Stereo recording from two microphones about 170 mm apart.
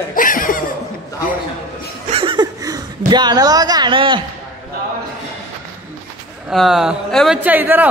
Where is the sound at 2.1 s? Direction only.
30° right (ahead or behind).